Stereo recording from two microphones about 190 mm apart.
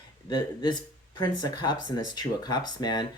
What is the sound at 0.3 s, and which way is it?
Speech, 25° left (ahead or behind).